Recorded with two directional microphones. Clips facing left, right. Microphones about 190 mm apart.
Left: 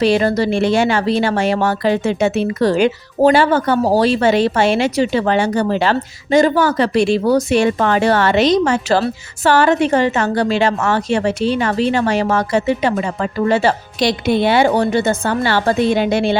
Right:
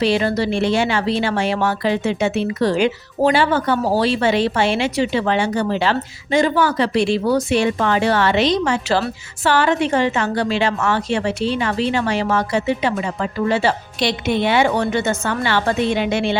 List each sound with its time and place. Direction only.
0.0 s a woman's voice: 45° left (ahead or behind)